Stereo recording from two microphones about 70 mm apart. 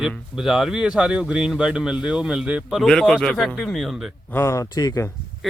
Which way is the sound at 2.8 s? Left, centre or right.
Centre.